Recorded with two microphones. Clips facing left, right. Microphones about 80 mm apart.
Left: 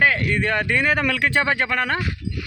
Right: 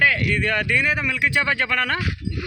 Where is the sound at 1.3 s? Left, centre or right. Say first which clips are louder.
Left 1 dB; left.